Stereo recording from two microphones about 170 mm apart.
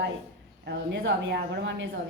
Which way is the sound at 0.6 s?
90° right.